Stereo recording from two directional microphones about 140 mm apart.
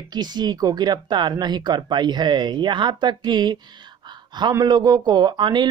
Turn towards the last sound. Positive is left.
turn(degrees=-30)  # may be behind; listen again after turning